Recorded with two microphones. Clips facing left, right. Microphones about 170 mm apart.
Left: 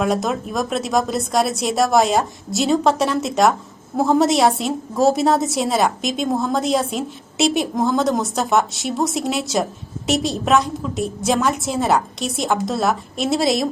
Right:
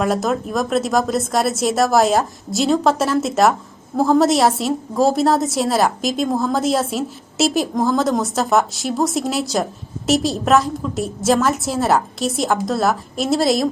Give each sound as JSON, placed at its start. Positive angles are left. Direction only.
{"t": 0.0, "sound": "a woman's voice", "side_deg": 0}